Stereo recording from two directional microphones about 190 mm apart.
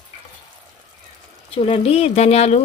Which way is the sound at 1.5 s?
30° left (ahead or behind).